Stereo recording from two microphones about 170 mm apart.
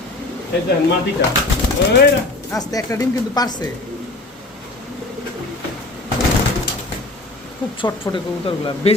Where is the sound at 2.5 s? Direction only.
20° left (ahead or behind).